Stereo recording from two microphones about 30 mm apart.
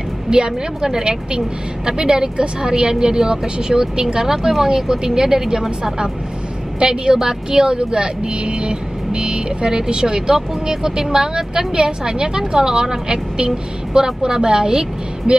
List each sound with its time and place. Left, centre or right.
0.3 s speech: right
7.7 s speech: right